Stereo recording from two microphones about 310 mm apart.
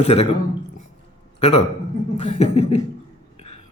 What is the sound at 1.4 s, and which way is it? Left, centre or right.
A man's voice, left.